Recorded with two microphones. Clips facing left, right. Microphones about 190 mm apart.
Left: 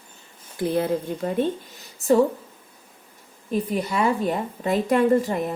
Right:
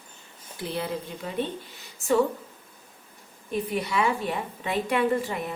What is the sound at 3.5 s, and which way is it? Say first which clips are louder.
A woman's voice: left 3 dB; 40° left (ahead or behind).